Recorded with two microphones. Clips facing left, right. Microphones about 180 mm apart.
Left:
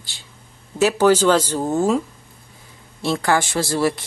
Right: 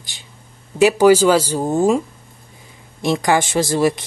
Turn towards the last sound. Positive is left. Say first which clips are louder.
# right 3 dB
turn(degrees=-20)  # may be behind; listen again after turning